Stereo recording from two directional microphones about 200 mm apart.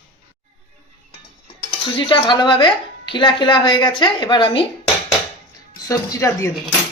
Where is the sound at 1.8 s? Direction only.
25° left (ahead or behind).